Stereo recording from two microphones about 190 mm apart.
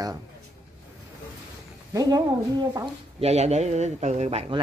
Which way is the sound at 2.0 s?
20° right (ahead or behind).